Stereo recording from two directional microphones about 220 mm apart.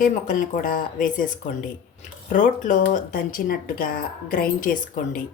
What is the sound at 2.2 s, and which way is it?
Speech, 35° left (ahead or behind).